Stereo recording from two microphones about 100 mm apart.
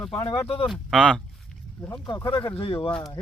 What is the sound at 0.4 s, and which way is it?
Speech, 70° left (ahead or behind).